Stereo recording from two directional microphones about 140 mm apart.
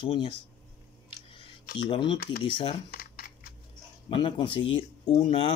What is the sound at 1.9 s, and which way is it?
Speech, 35° left (ahead or behind).